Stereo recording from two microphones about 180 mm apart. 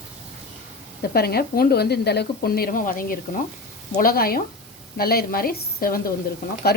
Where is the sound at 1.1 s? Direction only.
60° left (ahead or behind).